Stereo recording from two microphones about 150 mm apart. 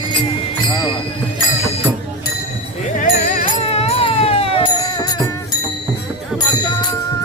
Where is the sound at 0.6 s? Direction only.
30° left (ahead or behind).